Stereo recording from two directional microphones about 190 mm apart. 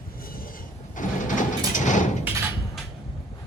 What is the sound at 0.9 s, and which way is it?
Sliding door, 45° left (ahead or behind).